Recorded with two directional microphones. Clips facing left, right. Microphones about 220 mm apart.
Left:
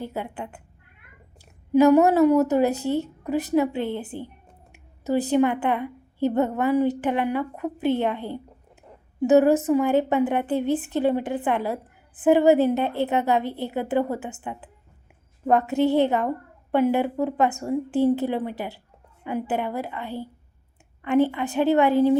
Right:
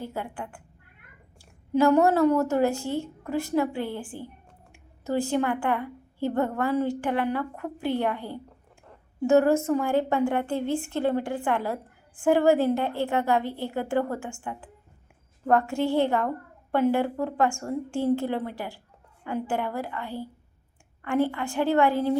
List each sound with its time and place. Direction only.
0.0 s a woman's voice: 20° left (ahead or behind)